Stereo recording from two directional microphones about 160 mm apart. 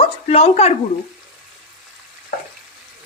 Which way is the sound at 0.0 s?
40° left (ahead or behind).